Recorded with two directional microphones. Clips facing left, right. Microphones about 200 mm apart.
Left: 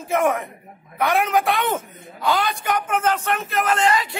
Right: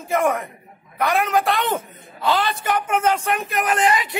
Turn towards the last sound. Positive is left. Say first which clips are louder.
# even
turn(degrees=-20)  # may be behind; listen again after turning